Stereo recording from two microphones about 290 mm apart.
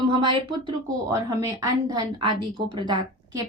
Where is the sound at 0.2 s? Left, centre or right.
Centre.